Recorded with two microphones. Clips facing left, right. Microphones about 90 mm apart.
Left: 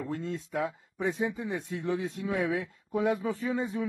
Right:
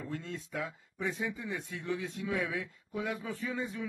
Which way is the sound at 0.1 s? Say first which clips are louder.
Left 5 dB; 35° left (ahead or behind).